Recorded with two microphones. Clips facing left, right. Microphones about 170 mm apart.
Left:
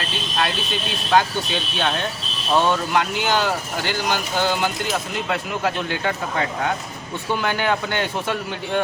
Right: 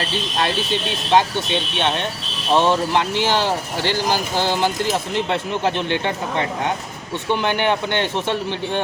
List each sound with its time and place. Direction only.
0.3 s speech: 30° right (ahead or behind)